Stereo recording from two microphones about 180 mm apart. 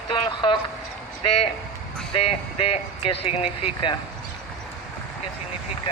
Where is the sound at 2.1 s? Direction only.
30° left (ahead or behind).